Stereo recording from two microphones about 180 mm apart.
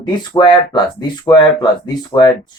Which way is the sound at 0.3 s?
25° left (ahead or behind).